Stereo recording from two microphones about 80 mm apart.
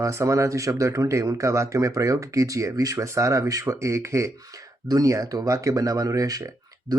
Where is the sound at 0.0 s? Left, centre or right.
Right.